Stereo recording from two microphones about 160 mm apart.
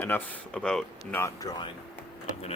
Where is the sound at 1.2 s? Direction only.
20° left (ahead or behind).